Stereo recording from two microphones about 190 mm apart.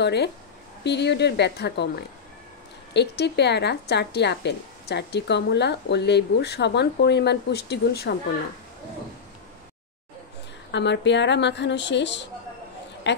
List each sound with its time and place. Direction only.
0.0 s speech: 65° left (ahead or behind)
10.7 s a woman's voice: 65° left (ahead or behind)